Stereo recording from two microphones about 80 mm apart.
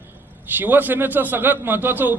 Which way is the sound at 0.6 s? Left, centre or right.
Right.